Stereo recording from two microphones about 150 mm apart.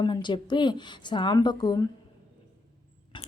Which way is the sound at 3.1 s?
30° left (ahead or behind).